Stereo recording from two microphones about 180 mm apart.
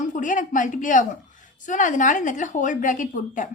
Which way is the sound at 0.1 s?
45° left (ahead or behind).